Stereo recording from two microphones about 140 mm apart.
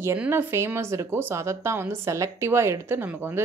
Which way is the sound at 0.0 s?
15° right (ahead or behind).